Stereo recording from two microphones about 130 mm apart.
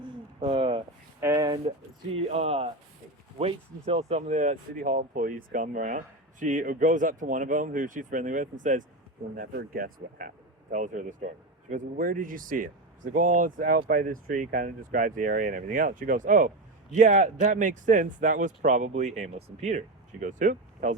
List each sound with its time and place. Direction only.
0.3 s a sound: 45° right (ahead or behind)
1.2 s a sound: 20° right (ahead or behind)
1.7 s speech: 55° right (ahead or behind); by 6.0 s 85° right
6.4 s speech: 75° right (ahead or behind)
11.7 s speech: 90° right
16.9 s speech: 65° right (ahead or behind)